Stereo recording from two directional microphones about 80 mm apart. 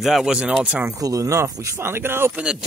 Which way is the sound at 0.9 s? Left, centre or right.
Right.